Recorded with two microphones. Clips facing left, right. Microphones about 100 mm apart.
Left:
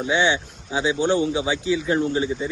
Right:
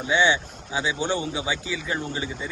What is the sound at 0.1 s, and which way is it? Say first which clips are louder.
A man's voice: even; 15° left (ahead or behind).